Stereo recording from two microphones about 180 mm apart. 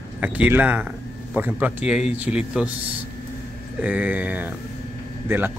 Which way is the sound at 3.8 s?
10° right (ahead or behind).